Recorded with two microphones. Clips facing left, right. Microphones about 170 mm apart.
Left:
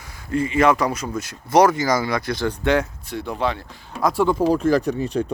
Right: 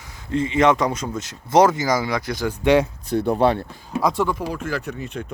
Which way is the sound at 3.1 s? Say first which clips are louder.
Right 8 dB; 35° right (ahead or behind).